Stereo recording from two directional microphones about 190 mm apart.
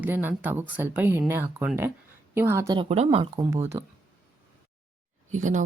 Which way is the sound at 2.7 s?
35° right (ahead or behind).